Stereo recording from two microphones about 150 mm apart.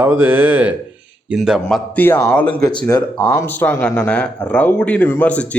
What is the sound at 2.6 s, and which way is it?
Speech, 30° left (ahead or behind).